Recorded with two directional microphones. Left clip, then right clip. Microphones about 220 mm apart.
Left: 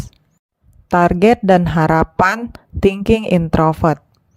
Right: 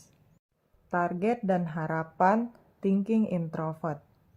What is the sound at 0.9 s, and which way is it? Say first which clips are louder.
A woman's voice: left 16 dB; 45° left (ahead or behind).